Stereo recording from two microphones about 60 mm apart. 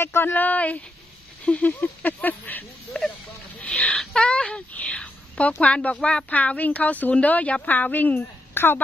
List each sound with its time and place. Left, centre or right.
0.0 s speech: left
0.3 s a woman's voice: left
2.9 s speech: centre
3.6 s a sound: left
3.9 s a woman's voice: centre; by 8.8 s left